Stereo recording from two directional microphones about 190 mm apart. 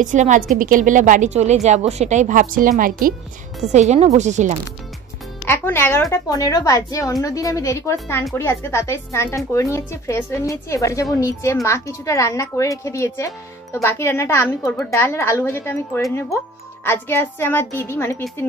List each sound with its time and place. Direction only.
0.0 s a woman's voice: 40° right (ahead or behind)
3.7 s a woman's voice: 35° right (ahead or behind)
5.5 s a woman's voice: 10° left (ahead or behind)